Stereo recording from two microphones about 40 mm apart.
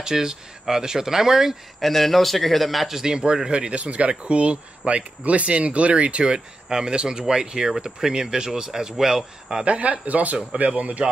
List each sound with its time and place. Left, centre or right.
0.0 s speech: centre
1.8 s a man's voice: centre
3.0 s speech: centre
6.7 s speech: centre
9.7 s speech: right